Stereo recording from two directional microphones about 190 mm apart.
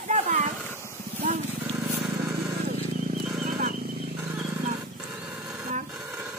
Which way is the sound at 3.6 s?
50° right (ahead or behind).